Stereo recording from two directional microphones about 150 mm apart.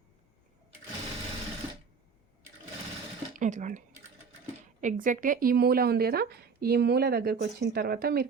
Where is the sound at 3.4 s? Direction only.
55° right (ahead or behind).